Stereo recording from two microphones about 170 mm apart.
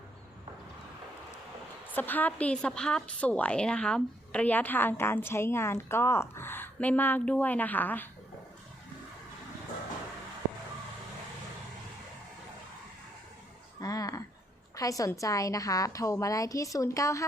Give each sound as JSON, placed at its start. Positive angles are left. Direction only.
{"t": 2.0, "sound": "a woman's voice", "side_deg": 10}
{"t": 13.8, "sound": "a sound", "side_deg": 20}
{"t": 14.8, "sound": "a woman's voice", "side_deg": 20}